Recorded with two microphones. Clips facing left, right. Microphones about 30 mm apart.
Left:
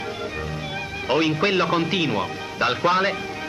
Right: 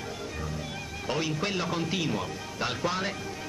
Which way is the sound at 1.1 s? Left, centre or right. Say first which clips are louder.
Left 10 dB; left.